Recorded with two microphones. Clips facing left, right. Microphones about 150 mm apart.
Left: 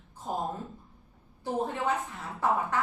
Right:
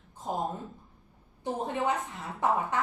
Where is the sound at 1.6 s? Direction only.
20° right (ahead or behind).